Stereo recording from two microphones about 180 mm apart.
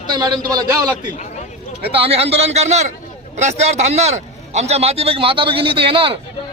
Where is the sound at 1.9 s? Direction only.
30° right (ahead or behind).